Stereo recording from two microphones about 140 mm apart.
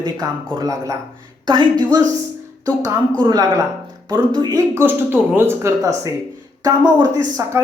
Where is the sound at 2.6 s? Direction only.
20° right (ahead or behind).